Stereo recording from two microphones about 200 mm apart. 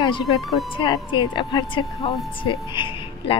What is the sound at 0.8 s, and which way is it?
A child's voice, 25° left (ahead or behind).